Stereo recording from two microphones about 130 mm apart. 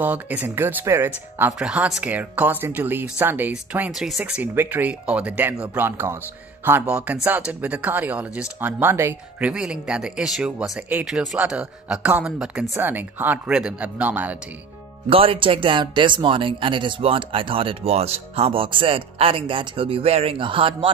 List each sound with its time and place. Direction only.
0.0 s speech: 10° right (ahead or behind)
3.9 s speech: 5° right (ahead or behind); by 9.5 s 20° right (ahead or behind)
9.5 s speech: 5° right (ahead or behind)
15.0 s speech: 45° right (ahead or behind)